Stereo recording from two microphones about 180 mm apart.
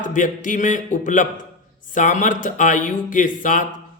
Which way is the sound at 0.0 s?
45° left (ahead or behind).